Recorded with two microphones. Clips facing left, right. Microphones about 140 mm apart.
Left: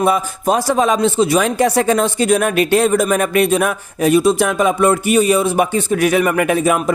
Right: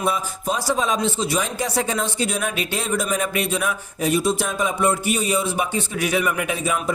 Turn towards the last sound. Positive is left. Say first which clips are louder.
# left 8 dB
turn(degrees=60)  # may be behind; listen again after turning